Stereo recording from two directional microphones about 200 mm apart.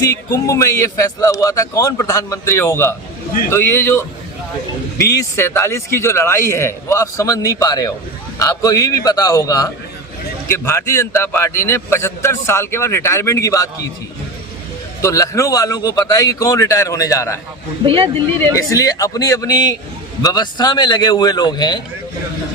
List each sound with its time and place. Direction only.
0.0 s a man's voice: 15° left (ahead or behind)
5.1 s a man's voice: 15° left (ahead or behind)
15.0 s a man's voice: 15° left (ahead or behind)
17.8 s speech: 25° right (ahead or behind)
18.5 s a man's voice: 15° left (ahead or behind)